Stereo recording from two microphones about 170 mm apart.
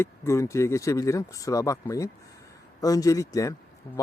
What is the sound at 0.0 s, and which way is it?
Speech, 15° left (ahead or behind).